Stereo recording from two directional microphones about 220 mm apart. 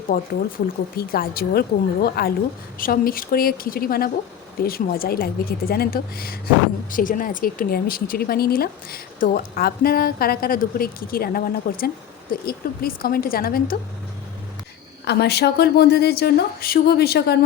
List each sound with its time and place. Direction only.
0.9 s speech: 45° left (ahead or behind)
15.0 s speech: 50° left (ahead or behind)